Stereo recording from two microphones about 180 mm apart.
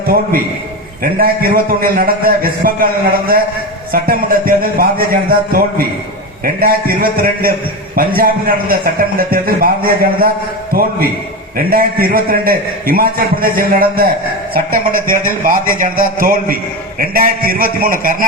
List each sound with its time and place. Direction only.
0.1 s a man's voice: 55° right (ahead or behind)